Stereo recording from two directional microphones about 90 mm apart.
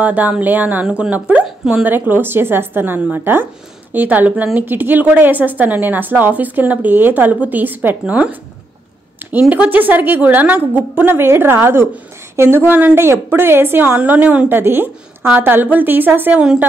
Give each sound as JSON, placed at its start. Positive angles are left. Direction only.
{"t": 0.0, "sound": "a woman's voice", "side_deg": -15}
{"t": 9.4, "sound": "a woman's voice", "side_deg": -15}